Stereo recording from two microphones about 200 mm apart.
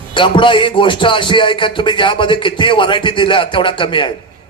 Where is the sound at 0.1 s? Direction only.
25° left (ahead or behind).